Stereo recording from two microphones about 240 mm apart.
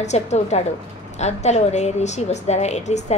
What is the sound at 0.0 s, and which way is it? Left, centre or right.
A woman's voice, left.